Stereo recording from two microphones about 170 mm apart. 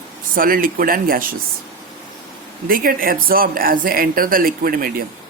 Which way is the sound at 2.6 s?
60° right (ahead or behind).